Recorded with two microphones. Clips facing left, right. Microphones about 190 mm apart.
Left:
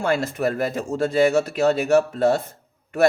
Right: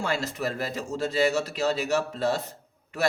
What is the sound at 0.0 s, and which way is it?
Speech, 55° left (ahead or behind).